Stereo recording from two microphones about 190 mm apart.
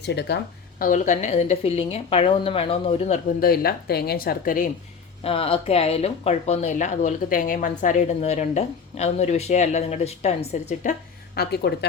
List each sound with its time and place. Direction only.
0.0 s speech: 60° left (ahead or behind)
0.8 s speech: 45° left (ahead or behind)
3.4 s speech: 55° left (ahead or behind)
5.2 s speech: 30° left (ahead or behind)
11.3 s speech: 60° left (ahead or behind)